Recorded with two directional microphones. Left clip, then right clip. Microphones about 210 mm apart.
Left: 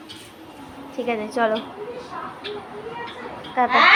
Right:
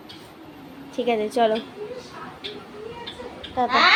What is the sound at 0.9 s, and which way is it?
Speech, 15° right (ahead or behind).